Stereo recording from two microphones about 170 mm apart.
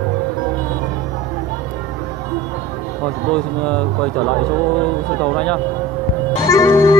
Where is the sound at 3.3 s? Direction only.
5° left (ahead or behind).